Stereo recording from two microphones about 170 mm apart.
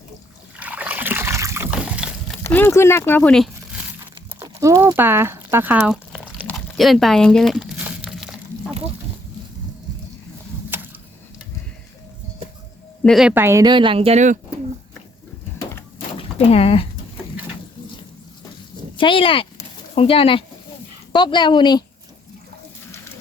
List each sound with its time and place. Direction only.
0.6 s water: 10° right (ahead or behind)
2.4 s speech: 15° left (ahead or behind)
4.4 s speech: 15° right (ahead or behind)
5.9 s a sound: 5° left (ahead or behind)
10.7 s a sound: 15° right (ahead or behind)
13.0 s speech: centre (ahead or behind)
13.3 s speech: 15° right (ahead or behind); by 14.3 s 40° right (ahead or behind)
16.1 s a sound: 35° left (ahead or behind)
18.9 s speech: 30° left (ahead or behind)